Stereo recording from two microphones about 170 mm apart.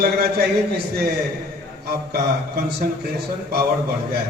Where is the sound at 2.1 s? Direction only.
70° right (ahead or behind).